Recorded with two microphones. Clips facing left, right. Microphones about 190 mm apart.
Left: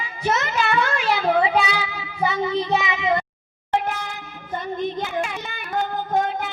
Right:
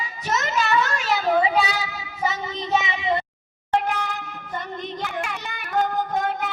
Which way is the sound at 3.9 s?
65° right (ahead or behind).